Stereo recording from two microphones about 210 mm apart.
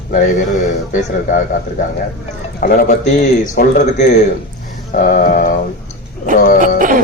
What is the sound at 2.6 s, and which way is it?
A man's voice, 45° left (ahead or behind).